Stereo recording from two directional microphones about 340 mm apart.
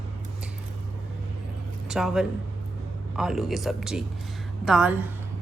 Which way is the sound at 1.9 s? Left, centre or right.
Centre.